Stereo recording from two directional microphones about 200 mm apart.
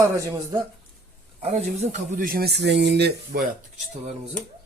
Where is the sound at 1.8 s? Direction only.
40° right (ahead or behind).